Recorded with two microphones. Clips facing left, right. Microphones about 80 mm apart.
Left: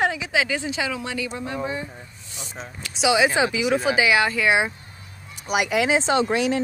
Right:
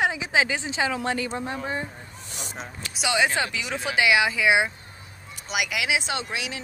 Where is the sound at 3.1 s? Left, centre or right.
Centre.